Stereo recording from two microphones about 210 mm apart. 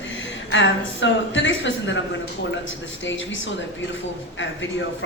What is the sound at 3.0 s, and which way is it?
Speech, 60° left (ahead or behind).